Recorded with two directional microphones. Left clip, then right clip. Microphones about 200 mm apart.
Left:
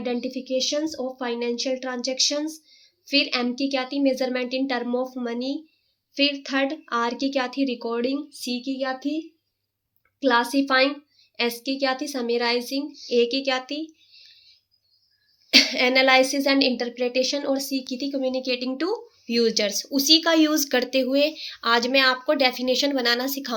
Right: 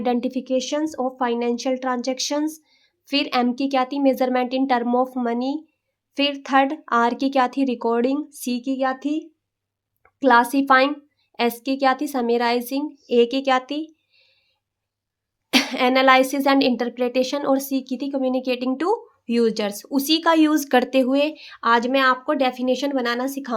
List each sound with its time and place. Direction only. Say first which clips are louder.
0.0 s a woman's voice: right 5 dB; 55° right (ahead or behind)
15.4 s a woman's voice: left 1 dB; 45° right (ahead or behind)